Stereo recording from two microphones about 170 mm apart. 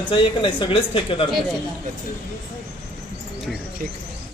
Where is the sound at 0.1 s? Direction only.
30° left (ahead or behind).